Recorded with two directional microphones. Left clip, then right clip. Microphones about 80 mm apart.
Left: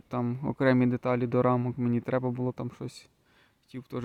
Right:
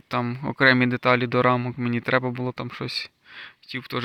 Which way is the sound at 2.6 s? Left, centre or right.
Left.